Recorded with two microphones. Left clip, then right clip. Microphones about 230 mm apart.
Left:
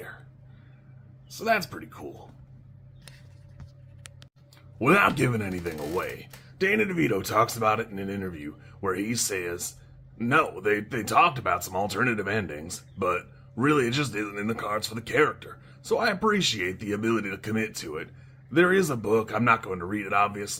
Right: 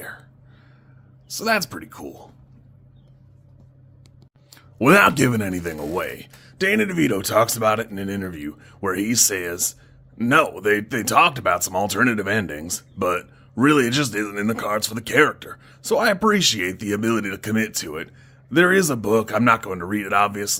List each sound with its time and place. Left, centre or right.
1.3 s speech: right
4.5 s speech: right